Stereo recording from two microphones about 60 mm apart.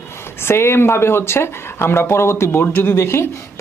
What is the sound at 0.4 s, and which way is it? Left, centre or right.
Speech, left.